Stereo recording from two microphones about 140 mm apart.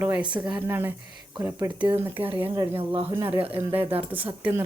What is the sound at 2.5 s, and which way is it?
Speech, 25° right (ahead or behind).